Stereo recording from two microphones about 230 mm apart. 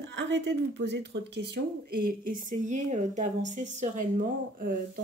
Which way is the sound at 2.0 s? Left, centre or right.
Right.